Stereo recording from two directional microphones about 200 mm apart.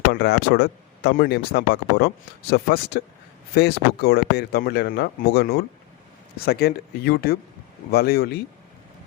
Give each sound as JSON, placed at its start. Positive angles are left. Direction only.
{"t": 0.1, "sound": "speech", "side_deg": 55}